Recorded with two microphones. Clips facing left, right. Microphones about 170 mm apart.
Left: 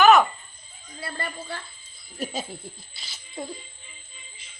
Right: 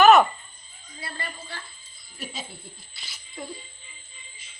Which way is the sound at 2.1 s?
45° left (ahead or behind).